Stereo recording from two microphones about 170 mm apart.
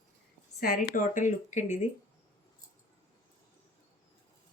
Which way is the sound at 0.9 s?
50° left (ahead or behind).